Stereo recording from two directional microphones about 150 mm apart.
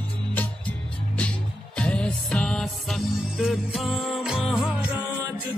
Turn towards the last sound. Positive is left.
turn(degrees=-5)  # may be behind; listen again after turning